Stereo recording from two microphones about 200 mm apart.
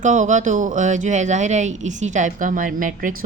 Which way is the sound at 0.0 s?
40° right (ahead or behind).